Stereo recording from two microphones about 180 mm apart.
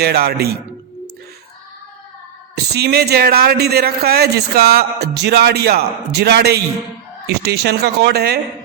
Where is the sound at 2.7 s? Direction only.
65° right (ahead or behind).